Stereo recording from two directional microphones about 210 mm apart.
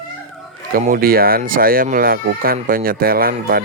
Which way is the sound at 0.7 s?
40° right (ahead or behind).